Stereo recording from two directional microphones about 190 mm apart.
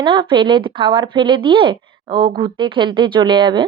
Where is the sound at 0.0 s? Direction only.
25° right (ahead or behind).